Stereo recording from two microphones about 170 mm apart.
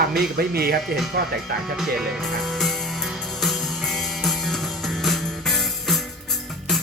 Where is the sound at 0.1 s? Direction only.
65° right (ahead or behind).